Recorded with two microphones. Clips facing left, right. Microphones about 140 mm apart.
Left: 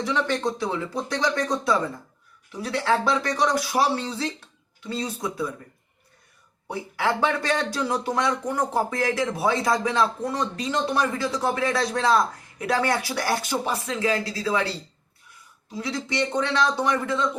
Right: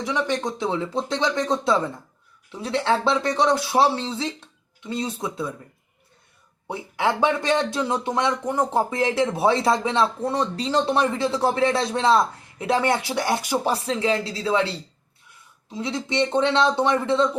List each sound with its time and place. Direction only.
0.0 s speech: 15° right (ahead or behind)
6.7 s speech: 20° right (ahead or behind)
13.7 s speech: 30° right (ahead or behind)
15.7 s speech: 25° right (ahead or behind)